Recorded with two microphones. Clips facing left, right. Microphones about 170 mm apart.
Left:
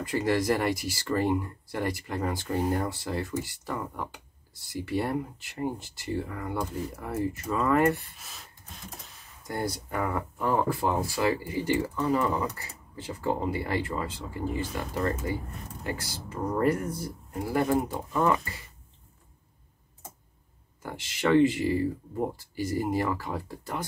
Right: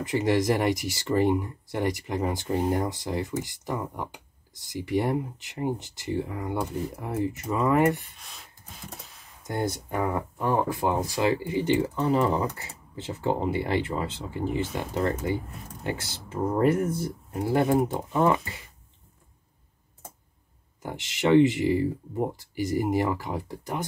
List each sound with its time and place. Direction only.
0.0 s speech: 20° right (ahead or behind)
8.2 s rub: centre (ahead or behind)
9.4 s speech: 20° right (ahead or behind)
20.8 s speech: 20° right (ahead or behind)